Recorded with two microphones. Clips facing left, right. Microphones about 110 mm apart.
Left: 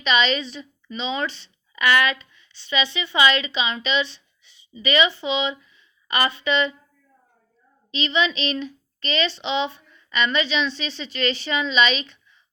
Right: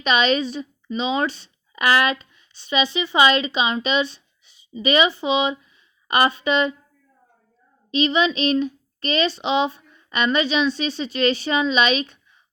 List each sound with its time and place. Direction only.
0.0 s a woman's voice: 45° right (ahead or behind)
7.9 s speech: 45° right (ahead or behind)